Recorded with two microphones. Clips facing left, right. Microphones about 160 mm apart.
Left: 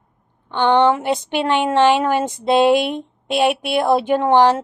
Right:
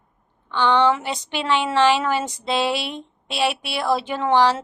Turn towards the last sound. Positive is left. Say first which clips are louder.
# left 5 dB
turn(degrees=50)  # may be behind; listen again after turning